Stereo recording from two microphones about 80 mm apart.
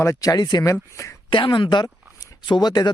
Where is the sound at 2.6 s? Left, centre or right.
Left.